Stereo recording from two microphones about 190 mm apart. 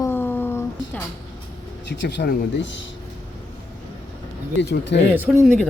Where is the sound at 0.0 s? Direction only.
10° left (ahead or behind).